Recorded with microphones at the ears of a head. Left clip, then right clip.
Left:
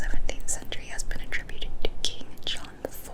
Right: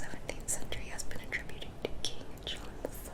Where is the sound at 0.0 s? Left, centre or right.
Left.